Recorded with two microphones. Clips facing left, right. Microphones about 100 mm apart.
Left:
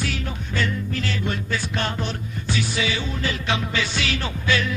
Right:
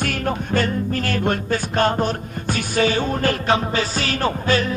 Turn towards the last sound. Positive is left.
turn(degrees=-40)  # may be behind; listen again after turning